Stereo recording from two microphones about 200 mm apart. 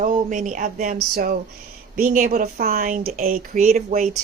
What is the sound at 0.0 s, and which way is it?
A woman's voice, 40° right (ahead or behind).